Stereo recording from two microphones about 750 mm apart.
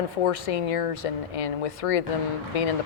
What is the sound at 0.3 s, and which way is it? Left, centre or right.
Speech, left.